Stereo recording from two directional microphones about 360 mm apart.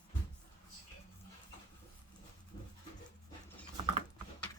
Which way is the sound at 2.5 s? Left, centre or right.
Centre.